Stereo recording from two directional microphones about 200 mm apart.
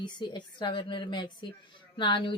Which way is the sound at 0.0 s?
20° left (ahead or behind).